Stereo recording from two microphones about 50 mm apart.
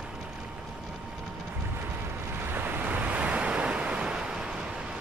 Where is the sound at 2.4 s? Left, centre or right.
Right.